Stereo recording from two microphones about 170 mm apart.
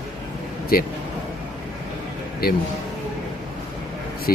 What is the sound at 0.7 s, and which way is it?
Speech, 60° left (ahead or behind).